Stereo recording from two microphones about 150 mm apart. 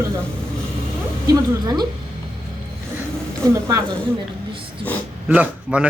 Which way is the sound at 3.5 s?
20° right (ahead or behind).